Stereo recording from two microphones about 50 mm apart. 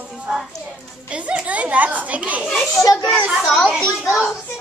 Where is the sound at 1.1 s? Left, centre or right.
Right.